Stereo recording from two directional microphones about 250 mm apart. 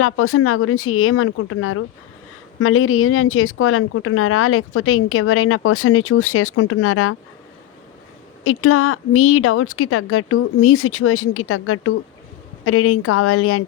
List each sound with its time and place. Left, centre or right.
0.0 s speech: left
8.4 s speech: left